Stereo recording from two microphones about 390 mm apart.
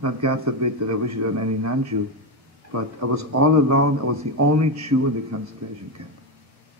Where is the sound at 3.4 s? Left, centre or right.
Right.